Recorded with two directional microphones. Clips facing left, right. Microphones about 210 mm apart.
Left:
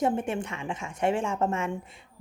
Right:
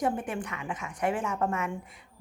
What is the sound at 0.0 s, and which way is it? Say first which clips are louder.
A woman's voice: left 3 dB; 25° left (ahead or behind).